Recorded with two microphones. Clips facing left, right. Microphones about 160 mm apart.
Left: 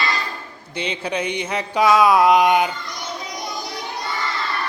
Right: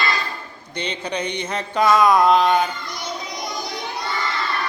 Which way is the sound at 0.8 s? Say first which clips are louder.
Left 1 dB; 5° left (ahead or behind).